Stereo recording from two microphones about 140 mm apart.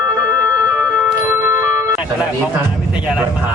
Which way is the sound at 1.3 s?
15° right (ahead or behind).